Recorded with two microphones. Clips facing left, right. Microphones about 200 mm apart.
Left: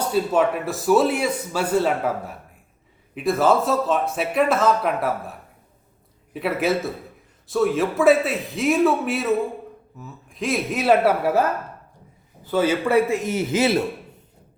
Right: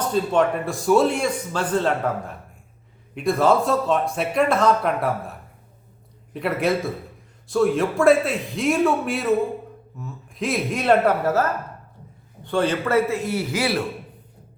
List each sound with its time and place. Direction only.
0.0 s a man's voice: 5° left (ahead or behind); by 13.8 s 20° left (ahead or behind)